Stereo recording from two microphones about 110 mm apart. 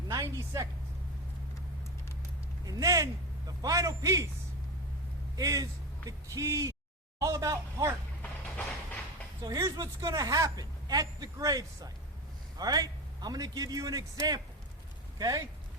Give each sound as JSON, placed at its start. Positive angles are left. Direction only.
{"t": 0.1, "sound": "speech", "side_deg": -30}
{"t": 2.6, "sound": "a man's voice", "side_deg": -35}
{"t": 5.4, "sound": "speech", "side_deg": -30}
{"t": 8.2, "sound": "vehicle", "side_deg": 15}
{"t": 9.6, "sound": "speech", "side_deg": -30}